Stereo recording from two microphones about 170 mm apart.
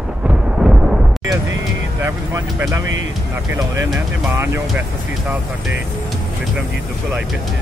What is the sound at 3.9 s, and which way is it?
Speech, 10° right (ahead or behind).